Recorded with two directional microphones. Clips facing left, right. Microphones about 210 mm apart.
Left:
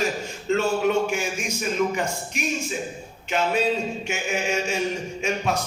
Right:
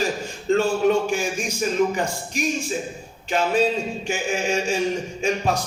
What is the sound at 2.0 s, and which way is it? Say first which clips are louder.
A man's voice: right 2 dB; 35° right (ahead or behind).